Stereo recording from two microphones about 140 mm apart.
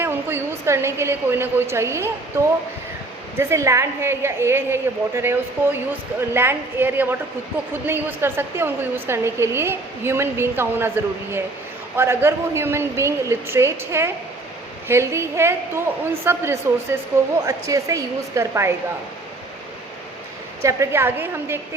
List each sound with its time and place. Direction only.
0.0 s a woman's voice: 15° right (ahead or behind)
3.3 s a woman's voice: 20° right (ahead or behind)
20.6 s a woman's voice: 20° right (ahead or behind)